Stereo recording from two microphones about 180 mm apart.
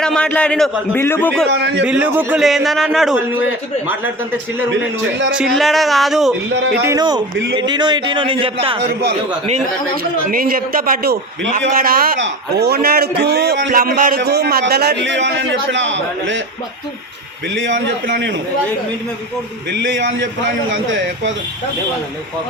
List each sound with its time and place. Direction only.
0.0 s a man's voice: 5° left (ahead or behind)
1.5 s a man's voice: 80° right
1.8 s a man's voice: 10° right (ahead or behind)
5.3 s a man's voice: centre (ahead or behind)
6.5 s speech: 75° right (ahead or behind)
6.8 s speech: 20° right (ahead or behind)
10.0 s a man's voice: 55° right (ahead or behind); by 16.4 s 90° right
17.5 s a man's voice: 85° right
19.7 s a man's voice: 90° right